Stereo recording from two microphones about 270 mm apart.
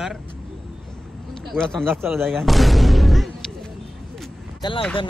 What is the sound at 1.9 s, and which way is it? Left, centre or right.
Speech, centre.